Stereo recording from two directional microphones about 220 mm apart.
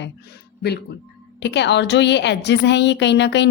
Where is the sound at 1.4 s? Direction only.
50° left (ahead or behind).